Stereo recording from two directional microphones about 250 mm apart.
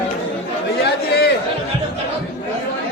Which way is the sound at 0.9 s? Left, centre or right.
Left.